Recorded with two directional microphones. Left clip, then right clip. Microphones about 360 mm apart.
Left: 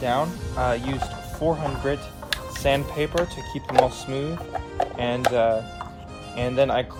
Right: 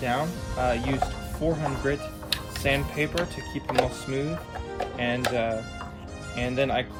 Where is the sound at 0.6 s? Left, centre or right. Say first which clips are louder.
Left 1 dB; centre.